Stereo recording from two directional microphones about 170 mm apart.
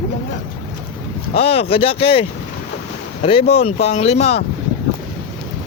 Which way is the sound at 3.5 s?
35° left (ahead or behind).